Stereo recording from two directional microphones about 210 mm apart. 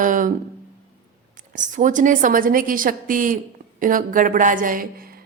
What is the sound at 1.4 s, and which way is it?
A woman's voice, 35° right (ahead or behind).